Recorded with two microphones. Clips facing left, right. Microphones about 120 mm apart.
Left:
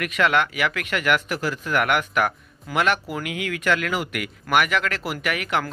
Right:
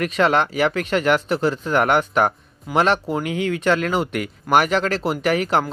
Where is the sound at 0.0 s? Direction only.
30° right (ahead or behind).